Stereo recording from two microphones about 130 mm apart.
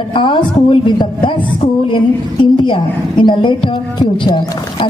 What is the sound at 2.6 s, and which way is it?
A woman's voice, 40° left (ahead or behind).